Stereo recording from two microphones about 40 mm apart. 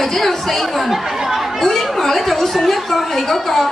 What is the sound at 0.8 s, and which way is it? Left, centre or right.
Chatter, centre.